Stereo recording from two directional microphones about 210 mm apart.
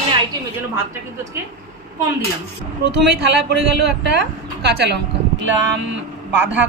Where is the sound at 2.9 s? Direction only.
55° right (ahead or behind).